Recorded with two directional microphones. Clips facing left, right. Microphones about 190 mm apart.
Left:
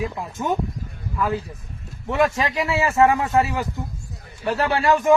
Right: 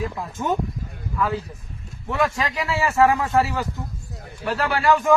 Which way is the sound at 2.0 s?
20° left (ahead or behind).